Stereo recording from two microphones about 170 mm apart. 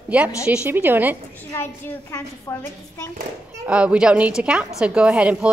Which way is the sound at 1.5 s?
15° left (ahead or behind).